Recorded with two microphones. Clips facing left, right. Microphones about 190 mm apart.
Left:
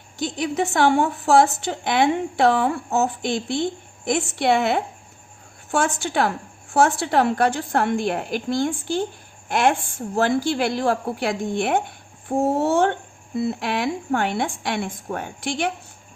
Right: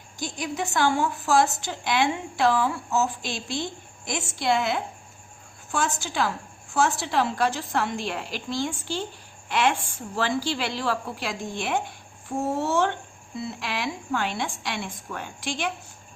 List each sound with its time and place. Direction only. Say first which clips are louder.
0.2 s a woman's voice: left 7 dB; 65° left (ahead or behind)